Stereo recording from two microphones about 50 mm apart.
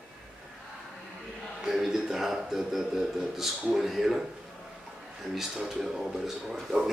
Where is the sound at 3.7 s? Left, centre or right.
Centre.